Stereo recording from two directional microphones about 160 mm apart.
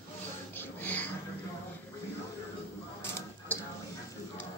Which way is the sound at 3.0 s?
15° left (ahead or behind).